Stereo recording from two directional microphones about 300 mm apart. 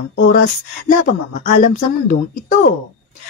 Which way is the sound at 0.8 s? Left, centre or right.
Left.